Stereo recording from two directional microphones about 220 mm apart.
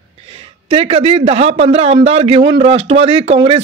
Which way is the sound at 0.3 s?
25° right (ahead or behind).